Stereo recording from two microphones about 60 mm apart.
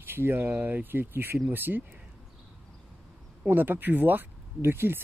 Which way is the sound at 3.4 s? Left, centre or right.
Right.